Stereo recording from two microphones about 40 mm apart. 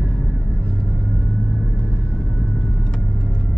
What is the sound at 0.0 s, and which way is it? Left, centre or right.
Vehicle, centre.